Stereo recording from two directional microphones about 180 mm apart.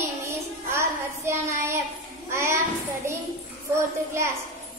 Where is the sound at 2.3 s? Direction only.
15° right (ahead or behind).